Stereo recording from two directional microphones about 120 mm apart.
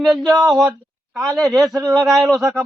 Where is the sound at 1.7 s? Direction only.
25° right (ahead or behind).